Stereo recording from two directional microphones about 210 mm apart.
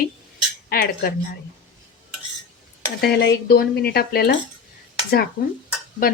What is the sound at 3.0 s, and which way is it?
Speech, 50° left (ahead or behind).